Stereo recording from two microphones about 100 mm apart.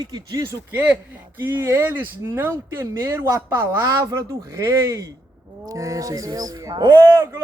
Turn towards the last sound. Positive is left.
turn(degrees=-25)  # may be behind; listen again after turning